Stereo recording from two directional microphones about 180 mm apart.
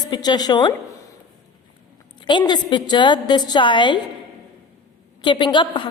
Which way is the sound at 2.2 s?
25° left (ahead or behind).